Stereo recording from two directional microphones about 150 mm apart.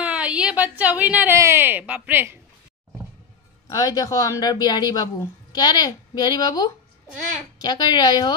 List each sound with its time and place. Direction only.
0.0 s a woman's voice: 10° right (ahead or behind)
3.6 s speech: 25° left (ahead or behind)